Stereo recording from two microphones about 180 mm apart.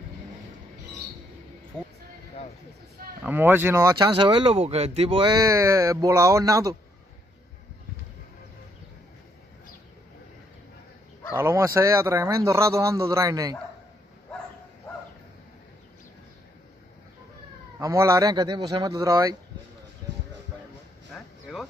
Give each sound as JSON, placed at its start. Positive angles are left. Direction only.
{"t": 3.3, "sound": "speech", "side_deg": -10}
{"t": 5.4, "sound": "speech", "side_deg": -15}
{"t": 11.3, "sound": "speech", "side_deg": -15}
{"t": 17.7, "sound": "speech", "side_deg": -15}
{"t": 21.1, "sound": "a sound", "side_deg": 0}